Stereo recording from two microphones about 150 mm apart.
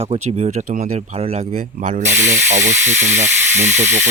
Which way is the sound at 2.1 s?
15° right (ahead or behind).